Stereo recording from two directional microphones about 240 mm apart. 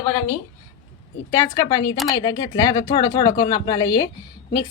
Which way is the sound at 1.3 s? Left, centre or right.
Centre.